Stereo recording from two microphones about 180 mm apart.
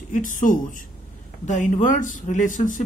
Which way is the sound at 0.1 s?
45° left (ahead or behind).